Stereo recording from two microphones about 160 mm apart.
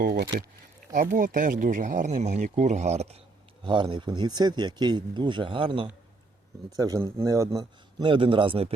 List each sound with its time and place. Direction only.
0.0 s speech: 80° right
0.9 s speech: 55° right (ahead or behind)
3.6 s speech: 30° right (ahead or behind)
6.7 s speech: 20° right (ahead or behind)